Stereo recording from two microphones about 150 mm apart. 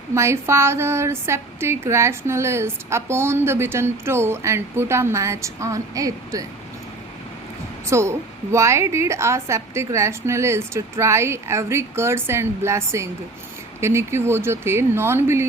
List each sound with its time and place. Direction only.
0.1 s a woman's voice: 20° right (ahead or behind)
7.9 s a woman's voice: 20° right (ahead or behind)